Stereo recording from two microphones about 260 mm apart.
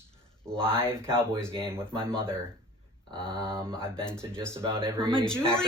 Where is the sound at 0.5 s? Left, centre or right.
Right.